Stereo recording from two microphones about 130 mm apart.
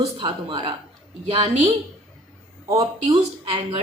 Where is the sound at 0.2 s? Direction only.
40° right (ahead or behind).